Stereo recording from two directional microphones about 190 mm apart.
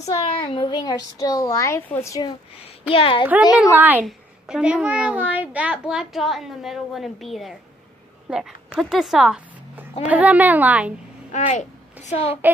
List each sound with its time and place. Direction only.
0.0 s speech: 25° left (ahead or behind)
2.9 s speech: 30° left (ahead or behind)
3.5 s a woman's voice: 10° right (ahead or behind)
11.3 s speech: 40° left (ahead or behind)